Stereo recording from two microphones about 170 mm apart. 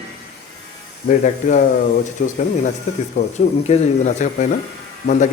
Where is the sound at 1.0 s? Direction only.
50° left (ahead or behind).